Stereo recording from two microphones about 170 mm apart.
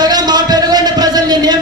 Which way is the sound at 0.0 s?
25° right (ahead or behind).